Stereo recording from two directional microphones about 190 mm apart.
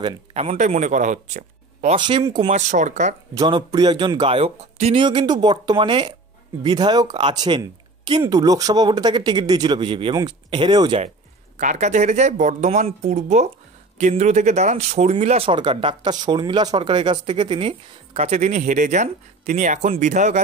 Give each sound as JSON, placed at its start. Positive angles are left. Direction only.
{"t": 0.3, "sound": "speech", "side_deg": -35}
{"t": 2.0, "sound": "speech", "side_deg": -25}
{"t": 2.7, "sound": "speech", "side_deg": -40}
{"t": 3.3, "sound": "speech", "side_deg": -20}
{"t": 11.5, "sound": "speech", "side_deg": -40}